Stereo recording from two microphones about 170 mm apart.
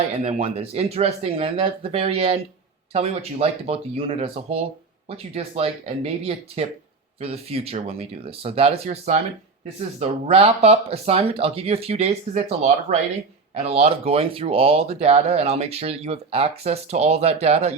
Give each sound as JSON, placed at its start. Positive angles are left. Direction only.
{"t": 0.2, "sound": "speech", "side_deg": -40}